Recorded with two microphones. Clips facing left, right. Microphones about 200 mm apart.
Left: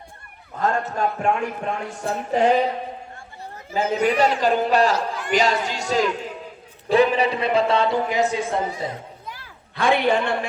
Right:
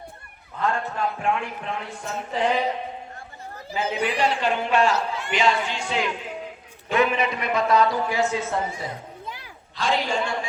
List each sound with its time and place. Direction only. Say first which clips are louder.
0.6 s a man's voice: left 3 dB; 40° left (ahead or behind)
4.0 s a man's voice: left 5 dB; 40° left (ahead or behind); by 8.9 s 15° left (ahead or behind)
9.7 s a man's voice: left 5 dB; 60° left (ahead or behind)